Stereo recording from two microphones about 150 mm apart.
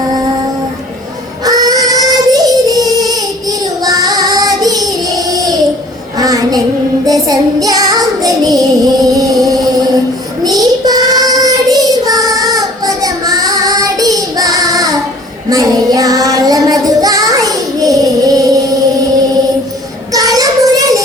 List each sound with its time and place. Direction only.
1.5 s child singing: 25° right (ahead or behind)
10.4 s child singing: 25° right (ahead or behind)
20.1 s child singing: 25° right (ahead or behind)